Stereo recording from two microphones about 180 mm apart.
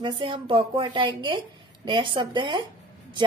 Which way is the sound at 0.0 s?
30° right (ahead or behind).